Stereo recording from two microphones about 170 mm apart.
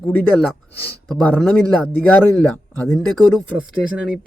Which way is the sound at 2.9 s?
Centre (ahead or behind).